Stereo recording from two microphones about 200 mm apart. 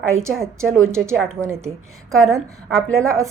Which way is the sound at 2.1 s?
15° right (ahead or behind).